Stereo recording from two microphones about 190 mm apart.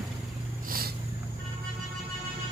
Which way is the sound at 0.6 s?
50° right (ahead or behind).